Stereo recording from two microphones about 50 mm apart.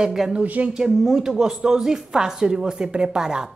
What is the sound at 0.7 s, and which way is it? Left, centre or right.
A woman's voice, centre.